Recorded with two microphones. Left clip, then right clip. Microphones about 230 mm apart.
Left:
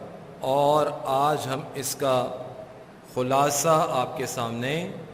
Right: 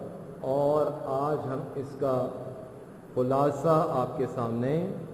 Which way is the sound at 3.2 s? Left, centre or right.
Centre.